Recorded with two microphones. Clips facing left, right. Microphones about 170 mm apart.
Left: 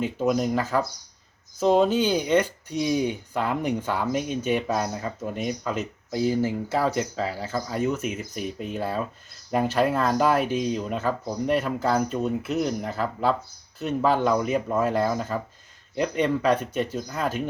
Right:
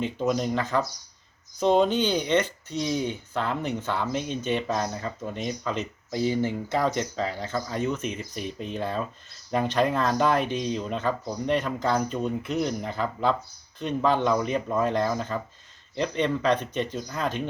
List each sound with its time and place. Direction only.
0.0 s speech: 5° left (ahead or behind)